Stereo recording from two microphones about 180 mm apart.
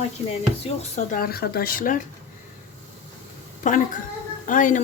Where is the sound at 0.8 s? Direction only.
45° left (ahead or behind).